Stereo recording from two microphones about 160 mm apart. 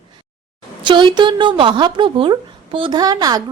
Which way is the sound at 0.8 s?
30° right (ahead or behind).